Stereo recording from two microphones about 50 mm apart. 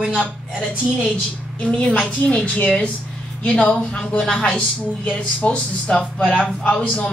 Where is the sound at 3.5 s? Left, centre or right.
Centre.